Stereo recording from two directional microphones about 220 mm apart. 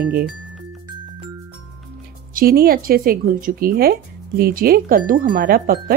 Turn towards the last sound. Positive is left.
turn(degrees=-40)  # may be behind; listen again after turning